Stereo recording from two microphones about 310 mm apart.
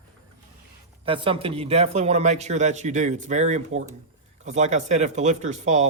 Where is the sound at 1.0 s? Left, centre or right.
Centre.